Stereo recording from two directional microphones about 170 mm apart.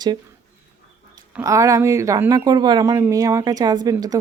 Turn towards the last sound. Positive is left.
turn(degrees=-20)  # may be behind; listen again after turning